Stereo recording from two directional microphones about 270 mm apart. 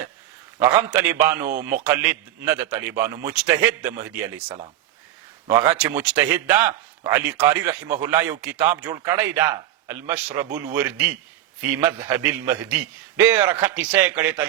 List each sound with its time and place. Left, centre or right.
0.6 s a man's voice: centre
1.5 s speech: right
1.9 s a man's voice: centre